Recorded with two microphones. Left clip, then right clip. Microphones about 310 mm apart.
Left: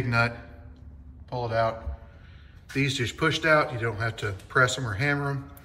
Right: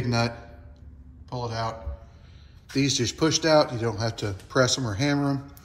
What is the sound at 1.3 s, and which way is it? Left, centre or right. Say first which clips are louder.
Speech: left 4 dB; centre.